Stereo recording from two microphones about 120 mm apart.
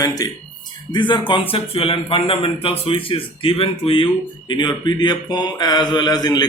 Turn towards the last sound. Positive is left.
turn(degrees=35)  # may be behind; listen again after turning